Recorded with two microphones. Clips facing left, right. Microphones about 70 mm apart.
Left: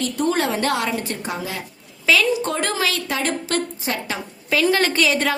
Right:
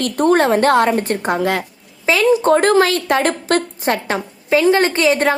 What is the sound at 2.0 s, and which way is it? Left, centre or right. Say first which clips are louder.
Speech: right 5 dB; right.